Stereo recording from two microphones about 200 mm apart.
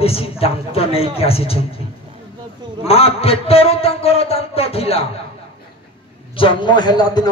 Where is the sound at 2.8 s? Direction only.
30° left (ahead or behind).